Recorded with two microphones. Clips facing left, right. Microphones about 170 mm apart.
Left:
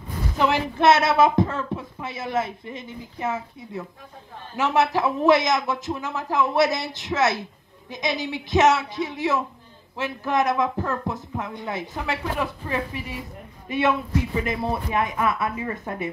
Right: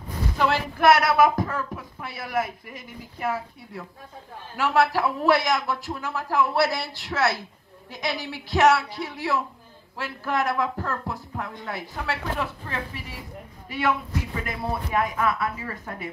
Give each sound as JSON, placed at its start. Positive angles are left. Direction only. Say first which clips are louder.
{"t": 0.4, "sound": "speech", "louder": "left 2 dB", "side_deg": 20}